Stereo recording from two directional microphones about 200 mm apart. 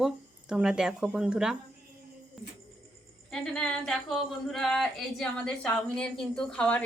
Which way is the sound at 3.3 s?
5° left (ahead or behind).